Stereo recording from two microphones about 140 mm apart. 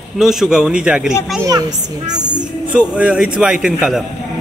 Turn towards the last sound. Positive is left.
turn(degrees=-5)  # may be behind; listen again after turning